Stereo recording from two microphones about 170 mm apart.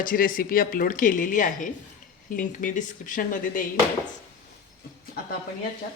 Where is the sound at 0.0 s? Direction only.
55° left (ahead or behind).